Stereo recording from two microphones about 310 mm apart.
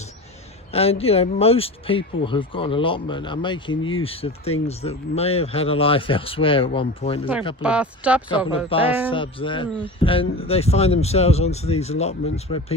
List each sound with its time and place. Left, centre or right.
0.7 s speech: centre
7.6 s speech: centre
8.4 s speech: centre